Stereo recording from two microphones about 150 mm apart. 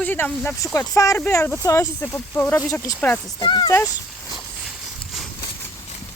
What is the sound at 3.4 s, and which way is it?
Speech, 30° left (ahead or behind).